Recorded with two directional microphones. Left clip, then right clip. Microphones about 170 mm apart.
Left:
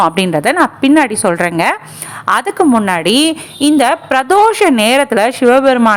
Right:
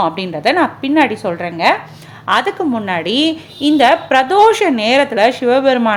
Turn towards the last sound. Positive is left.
turn(degrees=25)  # may be behind; listen again after turning